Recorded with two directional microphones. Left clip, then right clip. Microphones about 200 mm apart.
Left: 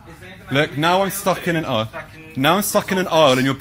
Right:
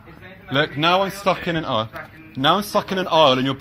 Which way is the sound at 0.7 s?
30° left (ahead or behind).